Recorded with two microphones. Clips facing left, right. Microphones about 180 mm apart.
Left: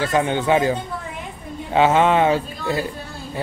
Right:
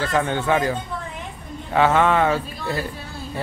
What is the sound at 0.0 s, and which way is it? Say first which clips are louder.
Speech: left 2 dB; 15° left (ahead or behind).